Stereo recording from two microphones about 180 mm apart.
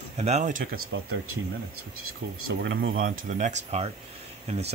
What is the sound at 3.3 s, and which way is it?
Speech, 40° right (ahead or behind).